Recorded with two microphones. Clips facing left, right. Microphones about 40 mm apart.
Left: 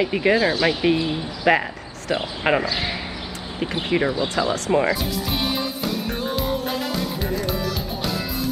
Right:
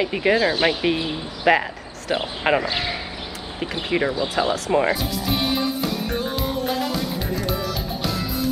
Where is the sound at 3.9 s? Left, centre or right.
Centre.